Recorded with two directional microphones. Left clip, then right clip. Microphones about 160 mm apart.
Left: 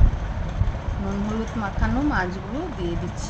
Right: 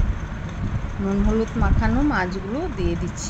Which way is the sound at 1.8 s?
20° right (ahead or behind).